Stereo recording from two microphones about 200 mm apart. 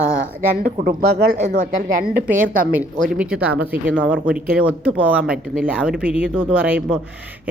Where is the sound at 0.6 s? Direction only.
45° right (ahead or behind).